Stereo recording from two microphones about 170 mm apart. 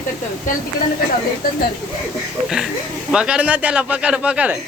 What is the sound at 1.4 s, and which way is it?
Speech, 60° left (ahead or behind).